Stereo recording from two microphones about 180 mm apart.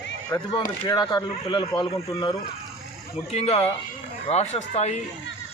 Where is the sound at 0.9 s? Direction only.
25° left (ahead or behind).